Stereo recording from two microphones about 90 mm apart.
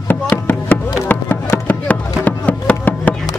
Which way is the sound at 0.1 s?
20° left (ahead or behind).